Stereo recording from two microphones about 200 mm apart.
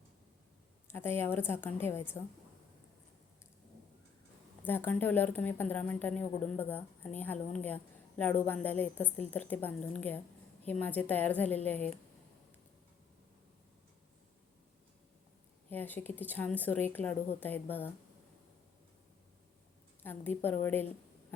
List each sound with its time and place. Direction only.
0.9 s speech: 10° left (ahead or behind)
4.6 s speech: 10° left (ahead or behind)
15.7 s speech: 10° left (ahead or behind)
20.0 s speech: 10° left (ahead or behind)